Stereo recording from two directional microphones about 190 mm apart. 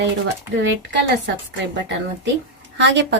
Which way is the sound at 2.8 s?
70° right (ahead or behind).